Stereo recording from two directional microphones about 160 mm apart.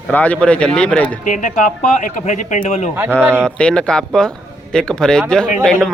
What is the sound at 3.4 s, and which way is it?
Speech, 5° left (ahead or behind).